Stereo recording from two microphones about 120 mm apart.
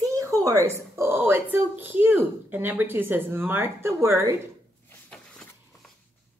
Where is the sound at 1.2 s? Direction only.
20° right (ahead or behind).